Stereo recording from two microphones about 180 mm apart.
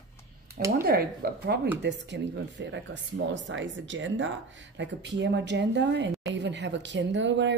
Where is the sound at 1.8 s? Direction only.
75° right (ahead or behind).